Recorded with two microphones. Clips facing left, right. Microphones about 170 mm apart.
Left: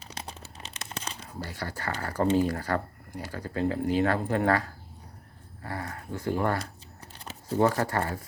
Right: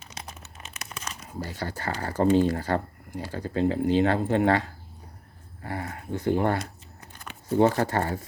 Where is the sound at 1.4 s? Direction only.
25° right (ahead or behind).